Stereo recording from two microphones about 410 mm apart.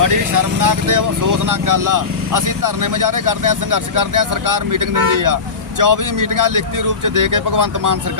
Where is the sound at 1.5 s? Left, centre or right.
Right.